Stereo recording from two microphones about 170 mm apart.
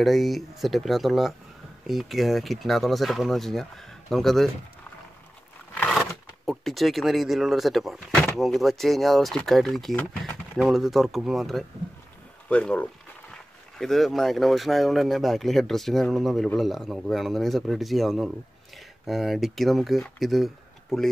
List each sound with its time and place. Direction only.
0.0 s speech: centre (ahead or behind)
5.8 s a sound: 5° left (ahead or behind)
8.4 s speech: centre (ahead or behind)